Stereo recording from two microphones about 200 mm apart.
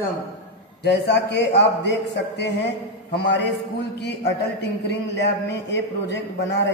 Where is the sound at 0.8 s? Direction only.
55° left (ahead or behind).